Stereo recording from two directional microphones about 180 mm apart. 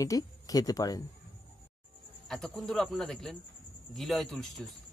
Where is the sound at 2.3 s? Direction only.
Centre (ahead or behind).